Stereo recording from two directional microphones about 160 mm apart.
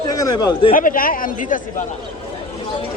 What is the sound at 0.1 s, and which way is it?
Speech, 25° left (ahead or behind).